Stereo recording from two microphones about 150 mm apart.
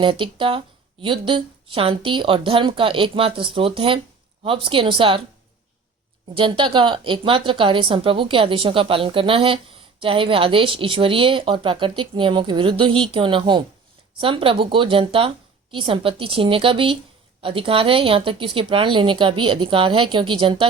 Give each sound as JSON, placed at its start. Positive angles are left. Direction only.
{"t": 0.0, "sound": "a woman's voice", "side_deg": -35}
{"t": 6.3, "sound": "a woman's voice", "side_deg": -35}